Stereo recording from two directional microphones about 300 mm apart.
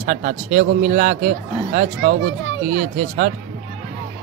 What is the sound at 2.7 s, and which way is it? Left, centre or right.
Speech, right.